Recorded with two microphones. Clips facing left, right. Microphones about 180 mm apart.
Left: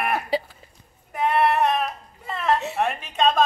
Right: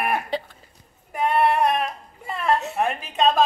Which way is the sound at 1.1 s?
Centre (ahead or behind).